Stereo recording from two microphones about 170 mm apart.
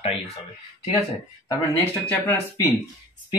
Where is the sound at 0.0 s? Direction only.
35° left (ahead or behind).